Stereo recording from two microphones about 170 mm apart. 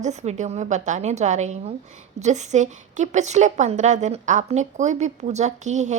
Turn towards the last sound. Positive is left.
turn(degrees=-45)  # may be behind; listen again after turning